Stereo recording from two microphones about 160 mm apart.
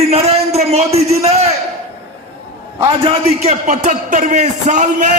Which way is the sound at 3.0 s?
45° right (ahead or behind).